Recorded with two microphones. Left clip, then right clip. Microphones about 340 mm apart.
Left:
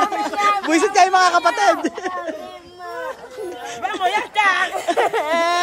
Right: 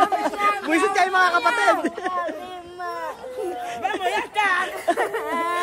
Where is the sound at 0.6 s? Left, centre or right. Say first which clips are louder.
Left 5 dB; centre.